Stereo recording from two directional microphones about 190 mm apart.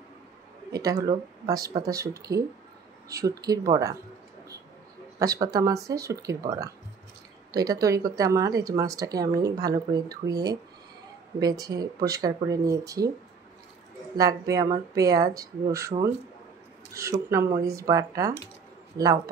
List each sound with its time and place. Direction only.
0.7 s speech: 20° right (ahead or behind)
5.2 s speech: 20° right (ahead or behind)
14.1 s speech: 20° right (ahead or behind)